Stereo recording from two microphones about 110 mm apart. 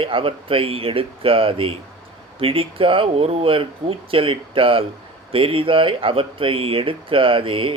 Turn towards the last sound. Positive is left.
turn(degrees=-55)  # may be behind; listen again after turning